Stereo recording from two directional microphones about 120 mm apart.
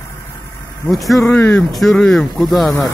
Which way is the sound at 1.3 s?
15° left (ahead or behind).